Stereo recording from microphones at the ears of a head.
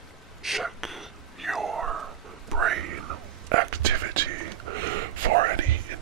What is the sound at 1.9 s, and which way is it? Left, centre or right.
Whispering, right.